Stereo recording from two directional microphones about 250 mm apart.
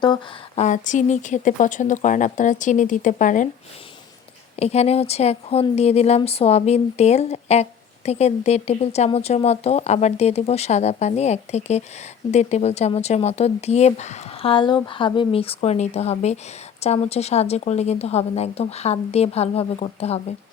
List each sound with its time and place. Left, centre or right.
0.0 s speech: left
4.5 s speech: left